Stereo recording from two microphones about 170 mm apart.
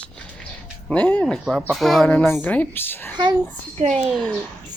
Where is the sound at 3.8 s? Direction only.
40° right (ahead or behind).